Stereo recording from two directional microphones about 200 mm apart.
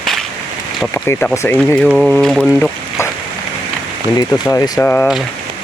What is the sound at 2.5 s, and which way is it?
Speech, 15° left (ahead or behind).